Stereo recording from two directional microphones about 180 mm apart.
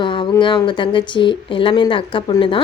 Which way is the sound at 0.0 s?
30° left (ahead or behind).